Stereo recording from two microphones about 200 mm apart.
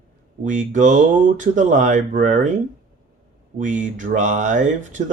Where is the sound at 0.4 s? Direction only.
40° right (ahead or behind).